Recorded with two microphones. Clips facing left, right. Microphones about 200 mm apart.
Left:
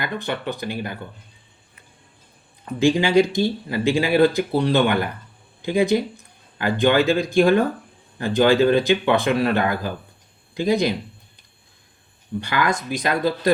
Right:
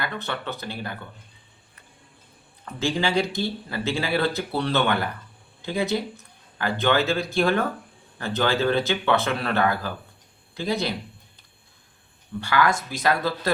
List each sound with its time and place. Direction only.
0.0 s speech: 15° left (ahead or behind)
2.6 s speech: 15° left (ahead or behind)
12.4 s speech: 20° left (ahead or behind)